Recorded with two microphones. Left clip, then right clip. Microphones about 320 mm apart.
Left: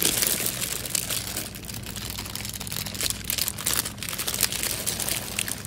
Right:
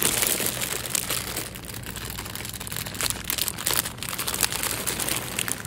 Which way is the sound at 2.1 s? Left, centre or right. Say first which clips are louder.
Even; right.